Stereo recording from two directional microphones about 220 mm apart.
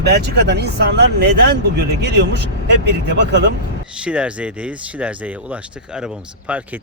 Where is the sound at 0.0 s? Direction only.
50° right (ahead or behind).